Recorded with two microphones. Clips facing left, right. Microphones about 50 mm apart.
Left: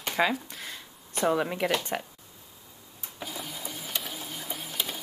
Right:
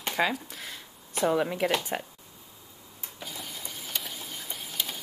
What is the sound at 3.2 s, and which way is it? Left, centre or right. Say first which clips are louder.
Printer: left 3 dB; centre.